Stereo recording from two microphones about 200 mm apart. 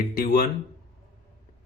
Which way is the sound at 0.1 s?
45° left (ahead or behind).